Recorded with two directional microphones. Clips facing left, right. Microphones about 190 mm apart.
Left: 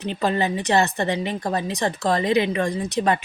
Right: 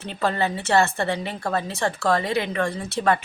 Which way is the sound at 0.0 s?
20° left (ahead or behind).